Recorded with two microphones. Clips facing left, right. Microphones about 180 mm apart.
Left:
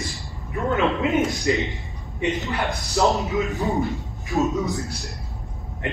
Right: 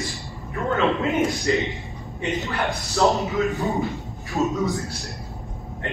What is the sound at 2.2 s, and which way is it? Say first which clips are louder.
Speech: left 1 dB; 20° left (ahead or behind).